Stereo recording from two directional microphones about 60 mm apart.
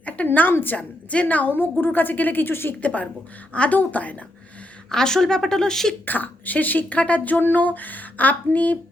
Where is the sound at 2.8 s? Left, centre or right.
Left.